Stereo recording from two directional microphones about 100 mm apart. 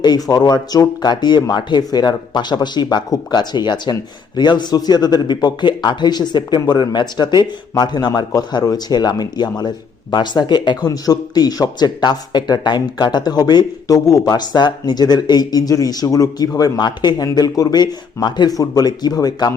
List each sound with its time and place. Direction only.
0.0 s speech: 40° left (ahead or behind)